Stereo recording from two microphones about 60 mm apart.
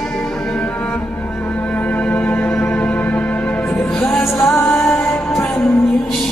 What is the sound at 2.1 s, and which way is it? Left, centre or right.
Music, left.